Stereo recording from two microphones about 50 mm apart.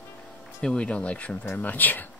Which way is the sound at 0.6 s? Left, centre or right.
Centre.